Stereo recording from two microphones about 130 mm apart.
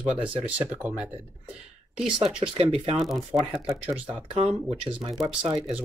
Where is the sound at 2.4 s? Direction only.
50° right (ahead or behind).